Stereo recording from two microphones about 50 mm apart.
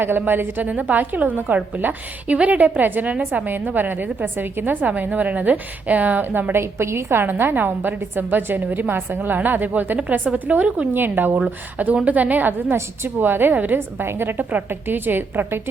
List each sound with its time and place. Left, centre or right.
0.3 s a woman's voice: right
6.5 s a woman's voice: right
7.3 s a woman's voice: right
13.7 s a woman's voice: right